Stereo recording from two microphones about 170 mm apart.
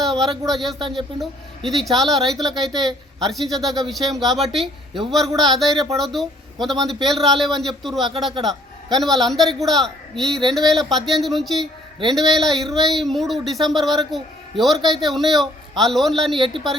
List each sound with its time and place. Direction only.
0.0 s speech: centre (ahead or behind)
16.3 s speech: 30° right (ahead or behind)